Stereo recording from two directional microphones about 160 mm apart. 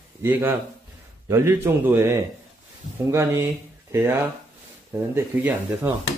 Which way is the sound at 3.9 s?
15° right (ahead or behind).